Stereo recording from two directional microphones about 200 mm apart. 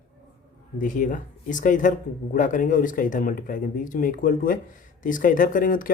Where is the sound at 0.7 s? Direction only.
40° left (ahead or behind).